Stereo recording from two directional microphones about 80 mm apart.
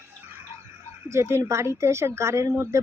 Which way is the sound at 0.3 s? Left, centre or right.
Right.